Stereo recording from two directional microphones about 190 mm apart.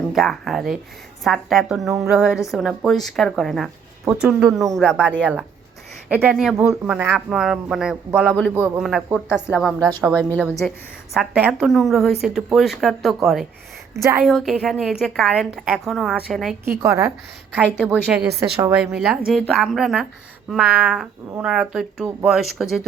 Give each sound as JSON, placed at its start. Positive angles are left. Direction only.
{"t": 0.1, "sound": "a woman's voice", "side_deg": 0}
{"t": 10.0, "sound": "a woman's voice", "side_deg": -15}
{"t": 10.6, "sound": "a woman's voice", "side_deg": 5}
{"t": 11.1, "sound": "speech", "side_deg": -5}
{"t": 13.9, "sound": "a woman's voice", "side_deg": -15}
{"t": 14.3, "sound": "speech", "side_deg": 0}
{"t": 16.7, "sound": "a woman's voice", "side_deg": -15}
{"t": 18.1, "sound": "speech", "side_deg": -5}